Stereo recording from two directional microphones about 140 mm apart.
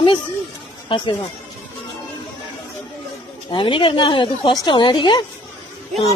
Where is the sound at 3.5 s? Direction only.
40° left (ahead or behind).